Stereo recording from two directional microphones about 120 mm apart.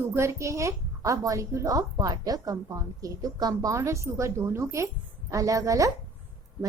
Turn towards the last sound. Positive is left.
turn(degrees=-30)  # may be behind; listen again after turning